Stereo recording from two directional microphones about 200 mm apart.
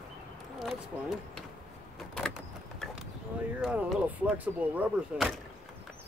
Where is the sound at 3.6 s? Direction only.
5° right (ahead or behind).